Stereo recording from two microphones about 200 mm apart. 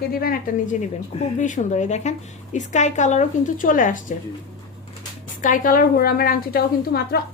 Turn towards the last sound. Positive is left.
turn(degrees=50)  # may be behind; listen again after turning